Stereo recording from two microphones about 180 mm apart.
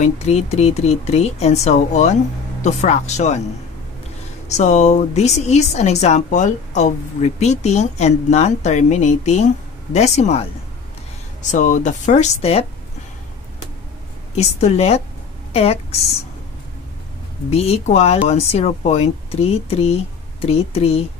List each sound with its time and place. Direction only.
0.0 s a woman's voice: 40° left (ahead or behind)
4.5 s a woman's voice: 40° left (ahead or behind)
11.4 s speech: 45° left (ahead or behind)
14.3 s a woman's voice: 35° left (ahead or behind)
17.5 s a woman's voice: 35° left (ahead or behind)